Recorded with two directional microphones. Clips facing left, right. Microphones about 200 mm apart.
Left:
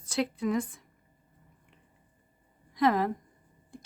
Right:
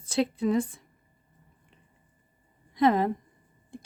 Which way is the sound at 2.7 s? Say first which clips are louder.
Right 3 dB; 25° right (ahead or behind).